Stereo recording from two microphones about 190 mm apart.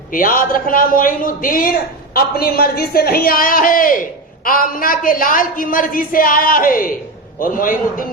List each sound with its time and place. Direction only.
0.1 s a woman's voice: 45° left (ahead or behind)